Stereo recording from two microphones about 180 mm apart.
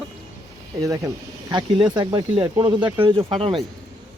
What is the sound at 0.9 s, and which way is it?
Speech, 20° right (ahead or behind).